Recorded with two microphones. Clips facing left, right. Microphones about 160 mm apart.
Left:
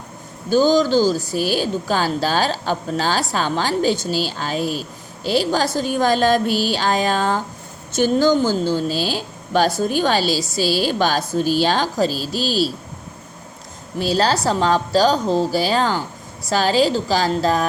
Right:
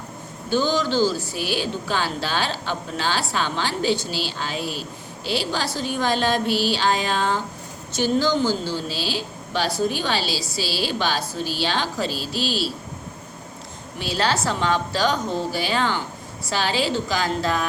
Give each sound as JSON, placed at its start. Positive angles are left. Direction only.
{"t": 0.5, "sound": "a woman's voice", "side_deg": 40}
{"t": 14.0, "sound": "a woman's voice", "side_deg": 40}